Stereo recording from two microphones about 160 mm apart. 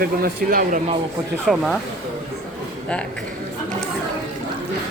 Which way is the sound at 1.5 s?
Centre (ahead or behind).